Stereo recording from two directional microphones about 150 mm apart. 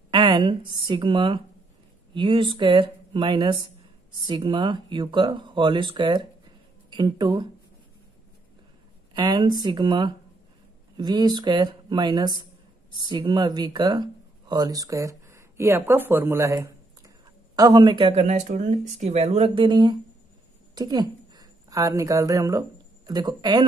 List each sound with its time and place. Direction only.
0.1 s a woman's voice: 30° right (ahead or behind)
9.1 s a woman's voice: 30° right (ahead or behind)